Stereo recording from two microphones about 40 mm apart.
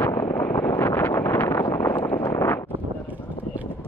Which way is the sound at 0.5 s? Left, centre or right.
Left.